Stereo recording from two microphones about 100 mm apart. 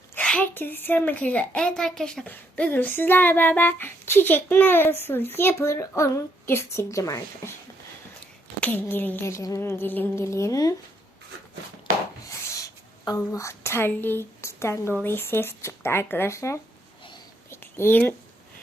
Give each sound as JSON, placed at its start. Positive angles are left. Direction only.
{"t": 0.1, "sound": "a woman's voice", "side_deg": 15}
{"t": 2.2, "sound": "speech", "side_deg": 15}
{"t": 8.6, "sound": "speech", "side_deg": 20}
{"t": 12.3, "sound": "rub", "side_deg": 35}
{"t": 13.1, "sound": "speech", "side_deg": 30}
{"t": 17.5, "sound": "whispering", "side_deg": 25}